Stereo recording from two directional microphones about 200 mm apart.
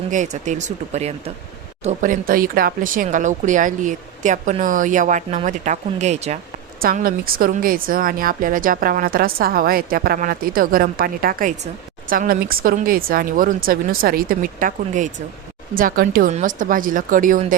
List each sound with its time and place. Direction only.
0.1 s speech: 40° right (ahead or behind)
6.8 s speech: 45° right (ahead or behind)